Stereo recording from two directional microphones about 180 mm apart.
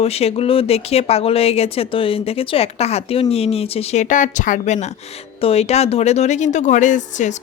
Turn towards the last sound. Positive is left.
turn(degrees=40)  # may be behind; listen again after turning